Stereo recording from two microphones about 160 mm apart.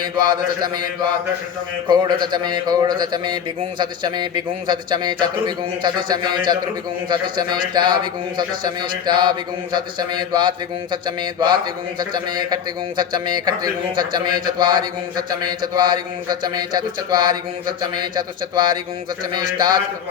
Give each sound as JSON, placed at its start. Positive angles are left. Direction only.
{"t": 0.0, "sound": "a man's voice", "side_deg": -25}
{"t": 1.9, "sound": "a man's voice", "side_deg": -25}